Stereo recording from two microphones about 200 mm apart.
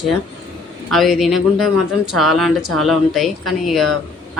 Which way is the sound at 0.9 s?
Centre (ahead or behind).